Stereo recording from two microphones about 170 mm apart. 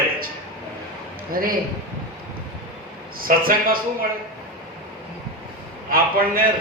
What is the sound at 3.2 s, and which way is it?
Speech, 60° right (ahead or behind).